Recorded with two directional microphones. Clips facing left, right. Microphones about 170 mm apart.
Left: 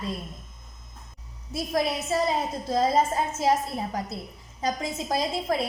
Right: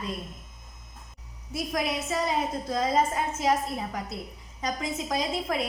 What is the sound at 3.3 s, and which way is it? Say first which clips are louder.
A woman's voice: left 2 dB; 30° left (ahead or behind).